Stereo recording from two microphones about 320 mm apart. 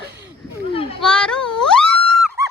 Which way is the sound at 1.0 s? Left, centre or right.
Centre.